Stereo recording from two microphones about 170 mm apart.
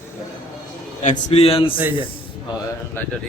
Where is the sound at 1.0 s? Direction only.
40° left (ahead or behind).